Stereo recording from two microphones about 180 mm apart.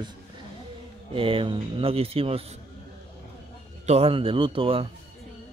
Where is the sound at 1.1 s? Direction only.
30° right (ahead or behind).